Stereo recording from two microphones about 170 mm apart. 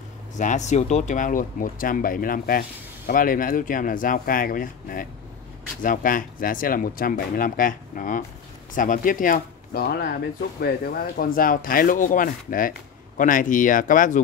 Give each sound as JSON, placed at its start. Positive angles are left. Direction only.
{"t": 0.4, "sound": "speech", "side_deg": 45}